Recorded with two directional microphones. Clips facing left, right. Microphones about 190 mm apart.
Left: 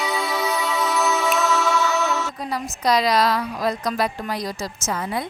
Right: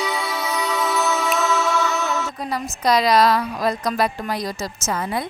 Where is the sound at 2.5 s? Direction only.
60° right (ahead or behind).